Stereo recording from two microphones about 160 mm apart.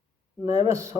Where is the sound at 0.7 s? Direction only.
20° right (ahead or behind).